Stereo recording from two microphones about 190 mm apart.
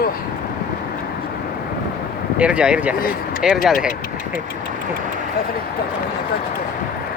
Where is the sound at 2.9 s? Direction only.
50° left (ahead or behind).